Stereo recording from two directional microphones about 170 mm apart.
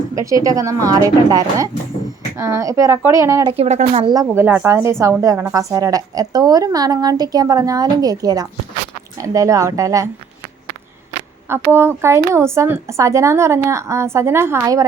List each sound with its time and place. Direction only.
0.2 s a woman's voice: 20° right (ahead or behind)
3.6 s speech: 40° right (ahead or behind)
4.0 s a woman's voice: 20° right (ahead or behind)
11.4 s speech: 15° right (ahead or behind)